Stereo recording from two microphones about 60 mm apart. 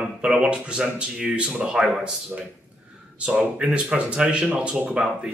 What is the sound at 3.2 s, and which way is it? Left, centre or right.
Speech, right.